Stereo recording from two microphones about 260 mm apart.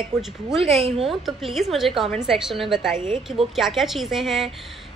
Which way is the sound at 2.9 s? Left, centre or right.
Right.